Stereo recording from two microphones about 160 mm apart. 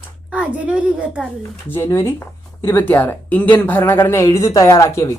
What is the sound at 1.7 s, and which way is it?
Speech, 15° left (ahead or behind).